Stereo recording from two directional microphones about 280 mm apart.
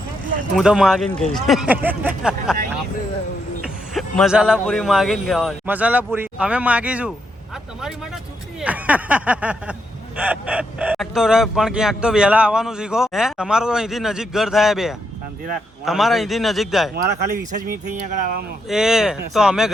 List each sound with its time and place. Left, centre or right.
0.5 s speech: centre
3.9 s speech: centre
16.9 s speech: right
18.7 s speech: centre